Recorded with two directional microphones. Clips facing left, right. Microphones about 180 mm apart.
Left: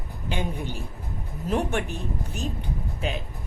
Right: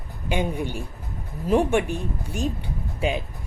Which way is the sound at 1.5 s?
15° right (ahead or behind).